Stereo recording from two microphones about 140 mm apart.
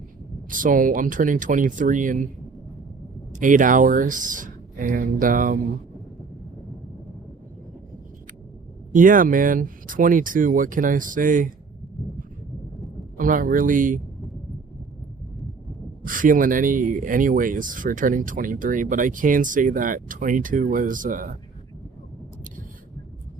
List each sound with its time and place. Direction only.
0.5 s speech: 75° right (ahead or behind)
3.3 s speech: 70° right (ahead or behind)
8.9 s speech: 70° right (ahead or behind)
13.1 s speech: 80° right
16.0 s speech: 75° right (ahead or behind)